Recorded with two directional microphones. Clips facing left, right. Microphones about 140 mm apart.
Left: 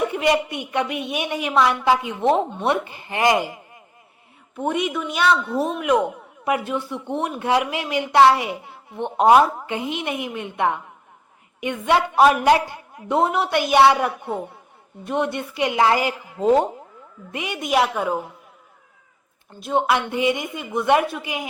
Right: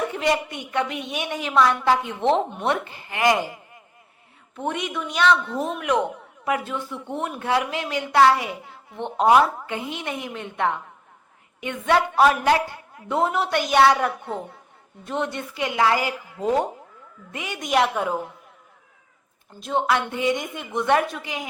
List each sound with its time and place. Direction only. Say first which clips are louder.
0.1 s a woman's voice: left 3 dB; 10° left (ahead or behind)
4.5 s a woman's voice: left 4 dB; 10° left (ahead or behind)
6.4 s a woman's voice: left 3 dB; 15° left (ahead or behind)
19.7 s speech: left 2 dB; 15° left (ahead or behind)